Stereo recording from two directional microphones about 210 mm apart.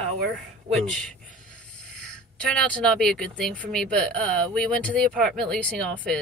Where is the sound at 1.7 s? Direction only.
5° left (ahead or behind).